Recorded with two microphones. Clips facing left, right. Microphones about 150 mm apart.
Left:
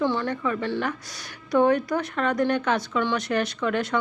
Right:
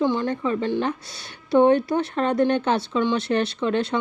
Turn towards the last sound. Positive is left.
turn(degrees=-25)  # may be behind; listen again after turning